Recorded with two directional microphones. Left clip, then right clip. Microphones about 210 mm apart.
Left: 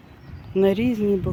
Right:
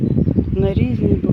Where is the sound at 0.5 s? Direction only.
10° left (ahead or behind).